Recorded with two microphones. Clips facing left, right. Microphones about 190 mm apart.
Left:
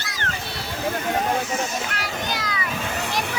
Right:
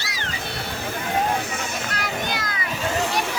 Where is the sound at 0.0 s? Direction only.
50° left (ahead or behind).